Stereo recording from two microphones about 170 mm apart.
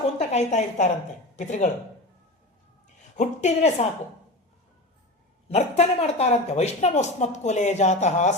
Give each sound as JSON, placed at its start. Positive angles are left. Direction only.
{"t": 0.2, "sound": "a woman's voice", "side_deg": 40}
{"t": 3.2, "sound": "speech", "side_deg": 40}
{"t": 5.5, "sound": "speech", "side_deg": 40}